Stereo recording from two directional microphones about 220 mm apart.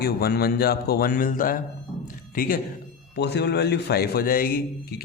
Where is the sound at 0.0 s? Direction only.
45° left (ahead or behind).